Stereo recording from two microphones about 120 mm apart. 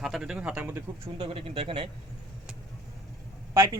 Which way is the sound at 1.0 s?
50° right (ahead or behind).